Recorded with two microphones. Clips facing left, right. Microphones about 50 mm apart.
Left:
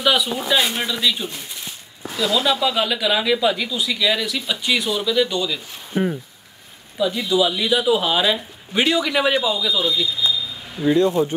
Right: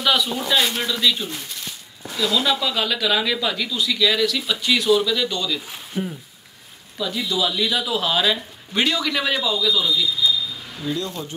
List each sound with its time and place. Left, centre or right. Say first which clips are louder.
0.0 s speech: left 1 dB; centre
5.9 s speech: left 6 dB; left
7.2 s speech: left 1 dB; centre; by 11.3 s left